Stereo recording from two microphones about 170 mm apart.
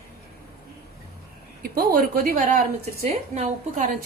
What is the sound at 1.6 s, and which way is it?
A woman's voice, 65° right (ahead or behind).